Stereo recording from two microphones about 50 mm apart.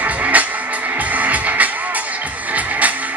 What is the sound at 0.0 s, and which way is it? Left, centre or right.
Music, right.